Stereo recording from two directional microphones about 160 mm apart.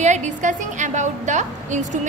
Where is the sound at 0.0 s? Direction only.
50° right (ahead or behind).